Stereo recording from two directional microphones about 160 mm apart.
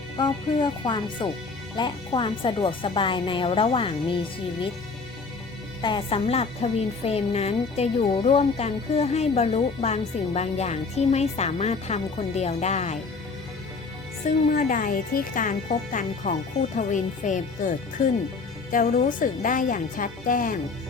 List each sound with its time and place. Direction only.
0.2 s speech: 30° left (ahead or behind)
5.8 s a woman's voice: 35° left (ahead or behind)
14.5 s a woman's voice: 55° left (ahead or behind)